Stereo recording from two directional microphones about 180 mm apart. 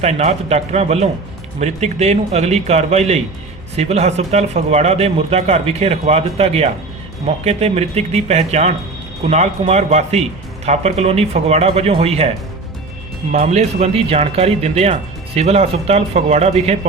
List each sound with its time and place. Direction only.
0.0 s speech: 35° right (ahead or behind)
13.3 s speech: 40° right (ahead or behind)